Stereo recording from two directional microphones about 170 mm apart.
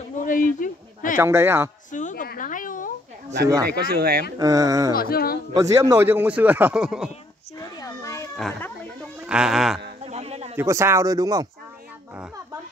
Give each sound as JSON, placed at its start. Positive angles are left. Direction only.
{"t": 0.2, "sound": "a sound", "side_deg": 50}
{"t": 1.1, "sound": "speech", "side_deg": -15}
{"t": 1.9, "sound": "a sound", "side_deg": 45}
{"t": 3.6, "sound": "speech", "side_deg": -65}
{"t": 4.4, "sound": "speech", "side_deg": -20}
{"t": 4.9, "sound": "a sound", "side_deg": 60}
{"t": 5.5, "sound": "speech", "side_deg": -20}
{"t": 7.8, "sound": "children playing", "side_deg": 20}
{"t": 8.4, "sound": "speech", "side_deg": 5}
{"t": 9.2, "sound": "speech", "side_deg": -5}
{"t": 10.0, "sound": "a sound", "side_deg": -40}
{"t": 10.5, "sound": "speech", "side_deg": -15}